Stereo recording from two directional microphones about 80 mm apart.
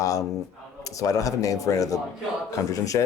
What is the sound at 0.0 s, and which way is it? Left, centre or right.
A man's voice, left.